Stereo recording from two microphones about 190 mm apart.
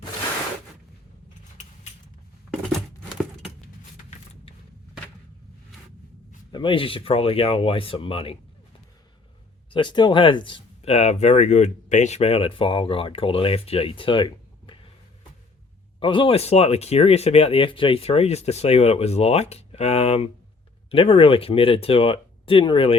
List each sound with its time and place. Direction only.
6.5 s speech: 25° left (ahead or behind)
9.7 s speech: 25° left (ahead or behind)
16.0 s speech: 25° left (ahead or behind)